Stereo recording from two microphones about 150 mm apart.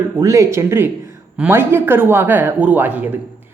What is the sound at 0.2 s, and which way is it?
Speech, 20° right (ahead or behind).